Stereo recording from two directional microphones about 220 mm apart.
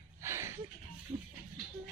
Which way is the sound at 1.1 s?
15° right (ahead or behind).